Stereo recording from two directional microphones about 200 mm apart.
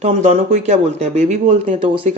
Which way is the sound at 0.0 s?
35° right (ahead or behind).